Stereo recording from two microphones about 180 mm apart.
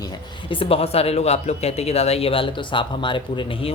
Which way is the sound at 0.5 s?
30° left (ahead or behind).